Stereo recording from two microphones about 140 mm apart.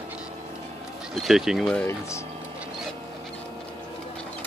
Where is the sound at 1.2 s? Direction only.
Centre (ahead or behind).